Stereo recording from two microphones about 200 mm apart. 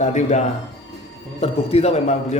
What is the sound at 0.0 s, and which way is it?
Speech, 35° left (ahead or behind).